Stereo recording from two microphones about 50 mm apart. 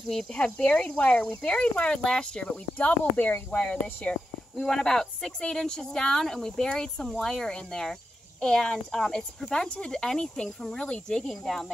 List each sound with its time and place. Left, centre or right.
0.3 s speech: left
0.8 s speech: left
2.8 s speech: left
3.5 s speech: left
4.6 s speech: centre
11.2 s speech: centre